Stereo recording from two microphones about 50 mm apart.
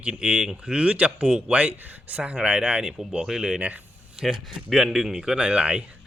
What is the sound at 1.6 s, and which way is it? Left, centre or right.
Speech, right.